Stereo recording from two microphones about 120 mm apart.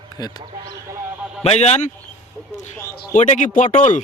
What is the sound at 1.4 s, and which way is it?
Speech, 60° left (ahead or behind).